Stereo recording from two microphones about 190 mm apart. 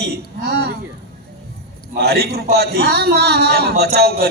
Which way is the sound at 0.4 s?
60° right (ahead or behind).